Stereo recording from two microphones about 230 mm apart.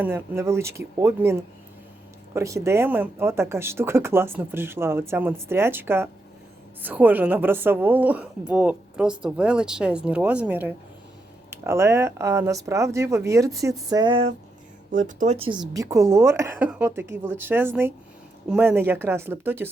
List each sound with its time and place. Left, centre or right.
0.0 s speech: centre